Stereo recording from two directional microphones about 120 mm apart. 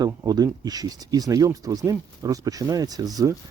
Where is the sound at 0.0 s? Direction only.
30° right (ahead or behind).